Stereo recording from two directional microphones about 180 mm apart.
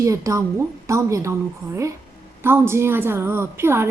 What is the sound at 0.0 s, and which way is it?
A woman's voice, 15° right (ahead or behind).